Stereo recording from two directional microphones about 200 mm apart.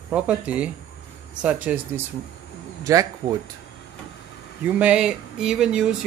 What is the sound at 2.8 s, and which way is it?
Speech, 15° right (ahead or behind).